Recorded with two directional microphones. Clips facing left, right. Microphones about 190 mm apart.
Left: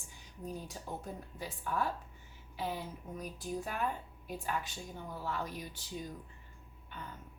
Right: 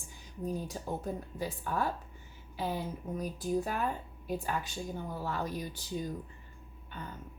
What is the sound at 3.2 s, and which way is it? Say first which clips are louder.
Speech: right 7 dB; 35° right (ahead or behind).